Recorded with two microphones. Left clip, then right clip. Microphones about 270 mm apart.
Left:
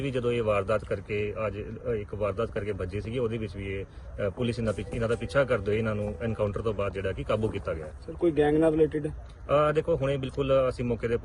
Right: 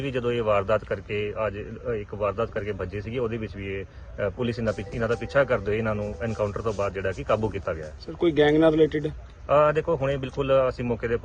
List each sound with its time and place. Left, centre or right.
0.0 s a man's voice: centre
8.2 s speech: right
9.5 s a man's voice: centre